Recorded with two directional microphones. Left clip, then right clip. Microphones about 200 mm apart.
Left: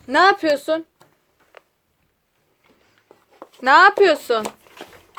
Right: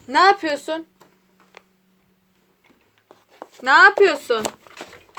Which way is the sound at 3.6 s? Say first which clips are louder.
Even; 30° left (ahead or behind).